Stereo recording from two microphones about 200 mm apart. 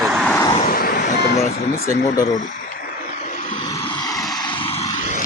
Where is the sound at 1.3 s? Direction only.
40° left (ahead or behind).